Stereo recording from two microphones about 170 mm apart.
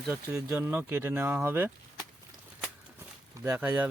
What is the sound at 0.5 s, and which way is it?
Speech, 10° right (ahead or behind).